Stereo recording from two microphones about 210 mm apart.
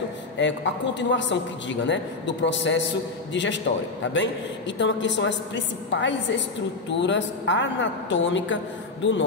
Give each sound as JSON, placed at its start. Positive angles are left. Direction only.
{"t": 0.4, "sound": "a man's voice", "side_deg": 60}